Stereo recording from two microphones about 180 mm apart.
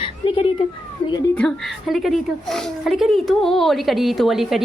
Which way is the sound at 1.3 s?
5° left (ahead or behind).